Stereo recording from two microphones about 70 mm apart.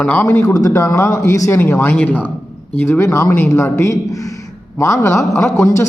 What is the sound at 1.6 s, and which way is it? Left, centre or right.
Speech, left.